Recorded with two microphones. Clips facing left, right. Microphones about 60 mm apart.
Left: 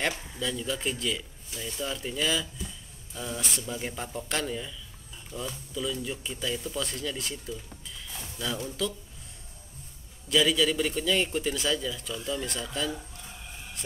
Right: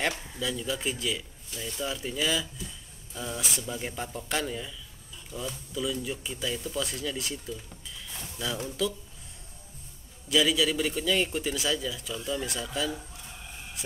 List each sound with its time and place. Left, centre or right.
0.4 s a man's voice: centre
8.6 s a man's voice: centre
10.2 s a man's voice: centre
13.8 s hum: centre